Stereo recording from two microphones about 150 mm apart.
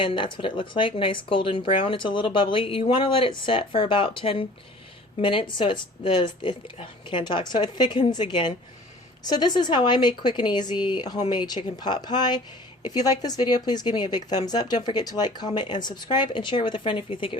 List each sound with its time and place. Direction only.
0.0 s speech: 35° left (ahead or behind)